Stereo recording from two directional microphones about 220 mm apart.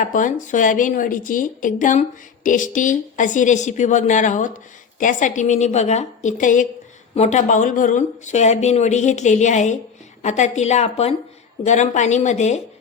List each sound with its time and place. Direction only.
0.0 s a woman's voice: 35° left (ahead or behind)